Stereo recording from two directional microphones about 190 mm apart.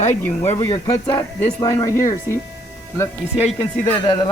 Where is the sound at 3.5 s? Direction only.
20° left (ahead or behind).